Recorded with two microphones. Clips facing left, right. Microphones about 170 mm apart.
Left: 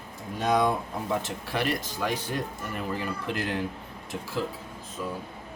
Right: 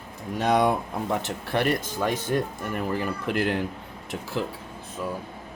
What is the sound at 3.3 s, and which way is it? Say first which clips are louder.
Speech: right 6 dB; 60° right (ahead or behind).